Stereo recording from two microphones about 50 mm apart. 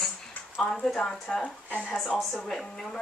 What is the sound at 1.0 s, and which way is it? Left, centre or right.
Speech, centre.